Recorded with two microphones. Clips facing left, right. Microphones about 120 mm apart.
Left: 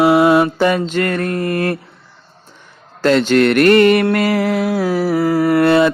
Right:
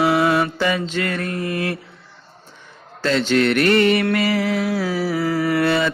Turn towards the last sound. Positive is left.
turn(degrees=50)  # may be behind; listen again after turning